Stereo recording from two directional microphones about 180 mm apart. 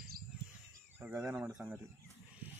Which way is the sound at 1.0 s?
15° right (ahead or behind).